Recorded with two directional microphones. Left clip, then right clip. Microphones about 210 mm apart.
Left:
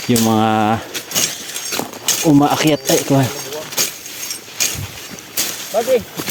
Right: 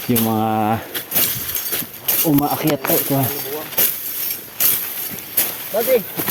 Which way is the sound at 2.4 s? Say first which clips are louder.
Left 4 dB; 20° left (ahead or behind).